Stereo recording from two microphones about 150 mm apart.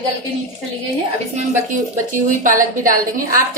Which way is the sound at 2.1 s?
60° right (ahead or behind).